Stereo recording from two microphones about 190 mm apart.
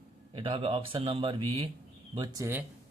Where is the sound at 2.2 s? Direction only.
15° right (ahead or behind).